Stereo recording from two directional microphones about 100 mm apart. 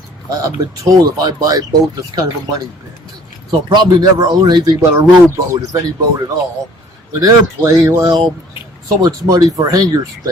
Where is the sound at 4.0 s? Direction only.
40° right (ahead or behind).